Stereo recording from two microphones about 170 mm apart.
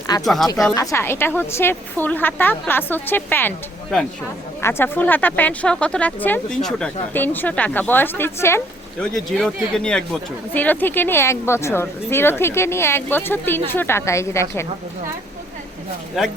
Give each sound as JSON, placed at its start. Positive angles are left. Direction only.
{"t": 0.1, "sound": "a woman's voice", "side_deg": 25}
{"t": 4.6, "sound": "a woman's voice", "side_deg": 15}
{"t": 9.1, "sound": "a woman's voice", "side_deg": 5}